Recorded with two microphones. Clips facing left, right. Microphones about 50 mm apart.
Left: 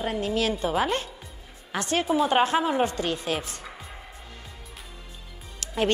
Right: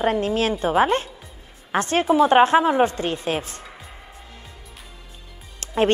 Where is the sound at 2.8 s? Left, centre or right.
Right.